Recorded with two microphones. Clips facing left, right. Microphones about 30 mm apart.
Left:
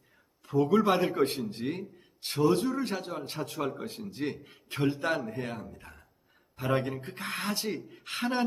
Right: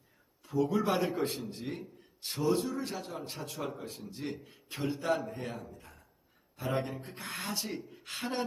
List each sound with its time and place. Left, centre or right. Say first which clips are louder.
0.5 s a man's voice: left 5 dB; left
0.9 s a man's voice: left 4 dB; left
1.1 s a man's voice: left 6 dB; left